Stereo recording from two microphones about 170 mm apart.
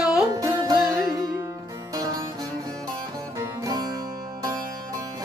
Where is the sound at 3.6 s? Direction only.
25° right (ahead or behind).